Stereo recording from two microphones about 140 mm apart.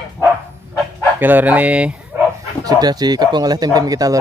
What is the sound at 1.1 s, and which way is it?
Speech, 15° right (ahead or behind).